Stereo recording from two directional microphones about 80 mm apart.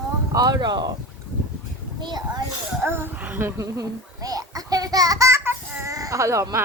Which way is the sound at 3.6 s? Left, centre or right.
Right.